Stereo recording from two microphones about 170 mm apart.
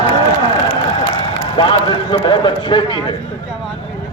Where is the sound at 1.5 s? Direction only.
30° left (ahead or behind).